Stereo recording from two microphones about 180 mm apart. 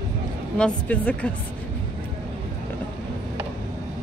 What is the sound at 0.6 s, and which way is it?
Speech, 5° left (ahead or behind).